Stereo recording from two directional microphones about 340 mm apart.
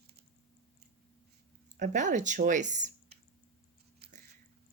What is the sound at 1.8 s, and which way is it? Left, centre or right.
Speech, right.